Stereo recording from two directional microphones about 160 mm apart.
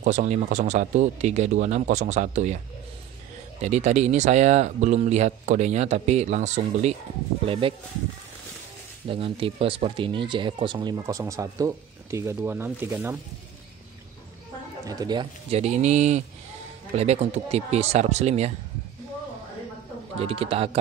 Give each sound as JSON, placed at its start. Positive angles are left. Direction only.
{"t": 0.0, "sound": "speech", "side_deg": -50}
{"t": 3.6, "sound": "speech", "side_deg": -45}
{"t": 9.0, "sound": "speech", "side_deg": -35}
{"t": 14.9, "sound": "speech", "side_deg": -25}
{"t": 15.5, "sound": "speech", "side_deg": -45}
{"t": 20.2, "sound": "speech", "side_deg": -35}